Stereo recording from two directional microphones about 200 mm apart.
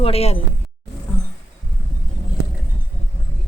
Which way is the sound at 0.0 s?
30° left (ahead or behind).